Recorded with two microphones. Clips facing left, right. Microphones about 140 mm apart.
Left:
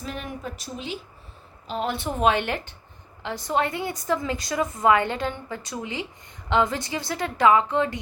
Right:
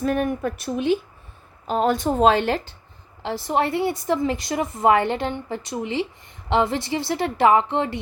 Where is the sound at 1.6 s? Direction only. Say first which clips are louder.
Right 7 dB; 45° right (ahead or behind).